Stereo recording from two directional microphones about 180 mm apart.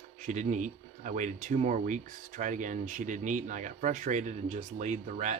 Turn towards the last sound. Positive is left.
turn(degrees=-40)  # may be behind; listen again after turning